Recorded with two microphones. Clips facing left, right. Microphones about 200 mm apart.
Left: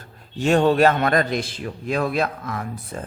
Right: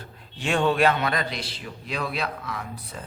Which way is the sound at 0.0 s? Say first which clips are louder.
Left 8 dB; 40° left (ahead or behind).